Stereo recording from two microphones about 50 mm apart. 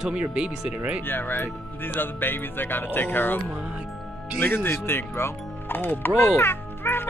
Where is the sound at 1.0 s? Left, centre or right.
Left.